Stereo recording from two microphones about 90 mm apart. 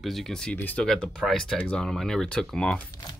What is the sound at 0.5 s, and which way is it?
Speech, 20° left (ahead or behind).